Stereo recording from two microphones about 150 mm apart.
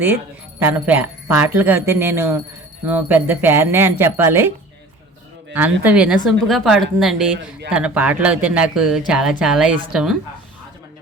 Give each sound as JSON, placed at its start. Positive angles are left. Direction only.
{"t": 0.6, "sound": "speech", "side_deg": -15}
{"t": 5.5, "sound": "a woman's voice", "side_deg": -10}